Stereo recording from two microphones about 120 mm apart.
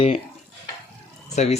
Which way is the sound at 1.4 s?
70° left (ahead or behind).